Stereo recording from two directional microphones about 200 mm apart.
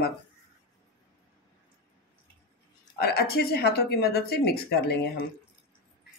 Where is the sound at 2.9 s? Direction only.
50° left (ahead or behind).